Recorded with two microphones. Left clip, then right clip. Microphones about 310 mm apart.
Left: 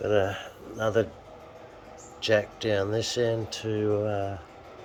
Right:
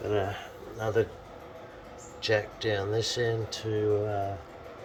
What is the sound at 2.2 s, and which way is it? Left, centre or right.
Speech, left.